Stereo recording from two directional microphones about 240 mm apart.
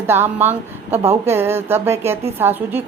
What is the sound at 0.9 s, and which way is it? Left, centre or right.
Speech, right.